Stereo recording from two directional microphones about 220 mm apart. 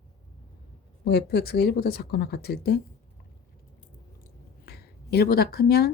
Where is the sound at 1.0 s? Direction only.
45° left (ahead or behind).